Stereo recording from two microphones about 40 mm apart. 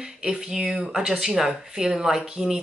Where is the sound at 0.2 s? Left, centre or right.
Centre.